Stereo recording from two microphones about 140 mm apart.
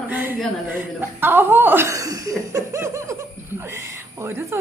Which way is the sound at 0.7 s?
15° right (ahead or behind).